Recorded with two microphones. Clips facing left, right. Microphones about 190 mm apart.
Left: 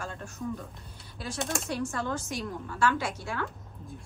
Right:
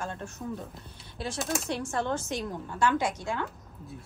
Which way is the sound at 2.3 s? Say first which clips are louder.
Right 2 dB; 20° right (ahead or behind).